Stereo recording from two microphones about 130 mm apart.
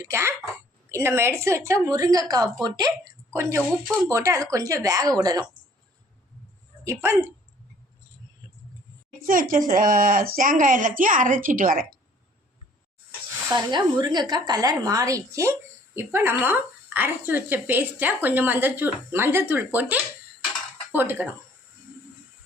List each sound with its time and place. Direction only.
0.0 s a woman's voice: 20° right (ahead or behind)
3.6 s speech: 10° right (ahead or behind)
4.1 s a woman's voice: 25° right (ahead or behind)
6.8 s a woman's voice: 20° right (ahead or behind)
9.2 s speech: 90° right
13.5 s a woman's voice: 30° right (ahead or behind); by 21.3 s 15° right (ahead or behind)